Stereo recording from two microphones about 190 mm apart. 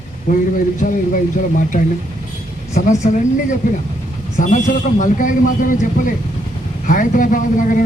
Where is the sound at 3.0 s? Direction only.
40° left (ahead or behind).